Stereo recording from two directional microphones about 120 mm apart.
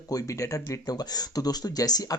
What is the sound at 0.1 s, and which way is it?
Speech, 30° left (ahead or behind).